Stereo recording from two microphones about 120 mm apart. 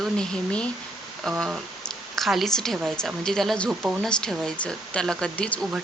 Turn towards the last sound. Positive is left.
turn(degrees=10)  # may be behind; listen again after turning